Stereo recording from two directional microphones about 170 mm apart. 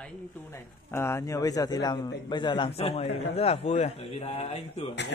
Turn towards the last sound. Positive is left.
turn(degrees=40)  # may be behind; listen again after turning